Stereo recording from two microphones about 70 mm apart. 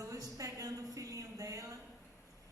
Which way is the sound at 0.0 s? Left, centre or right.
Right.